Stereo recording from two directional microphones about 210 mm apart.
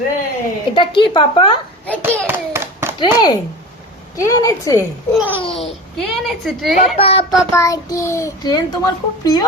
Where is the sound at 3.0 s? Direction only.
20° left (ahead or behind).